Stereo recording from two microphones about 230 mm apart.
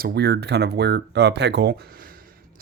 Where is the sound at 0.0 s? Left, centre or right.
Right.